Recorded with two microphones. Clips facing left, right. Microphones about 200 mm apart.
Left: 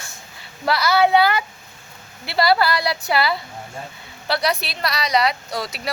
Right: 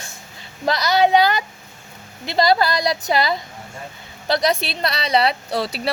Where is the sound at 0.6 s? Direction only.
20° right (ahead or behind).